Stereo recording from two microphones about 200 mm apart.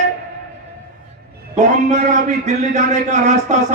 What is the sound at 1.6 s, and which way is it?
A man's voice, 35° right (ahead or behind).